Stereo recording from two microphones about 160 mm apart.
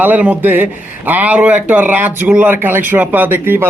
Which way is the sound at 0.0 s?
10° right (ahead or behind).